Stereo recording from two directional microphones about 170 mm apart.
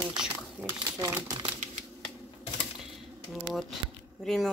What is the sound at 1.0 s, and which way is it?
Speech, 20° right (ahead or behind).